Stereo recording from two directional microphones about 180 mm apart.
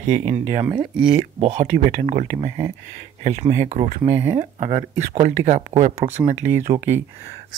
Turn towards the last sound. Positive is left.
turn(degrees=-10)  # may be behind; listen again after turning